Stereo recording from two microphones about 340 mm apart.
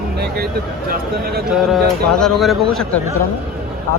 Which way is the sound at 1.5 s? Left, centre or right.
Centre.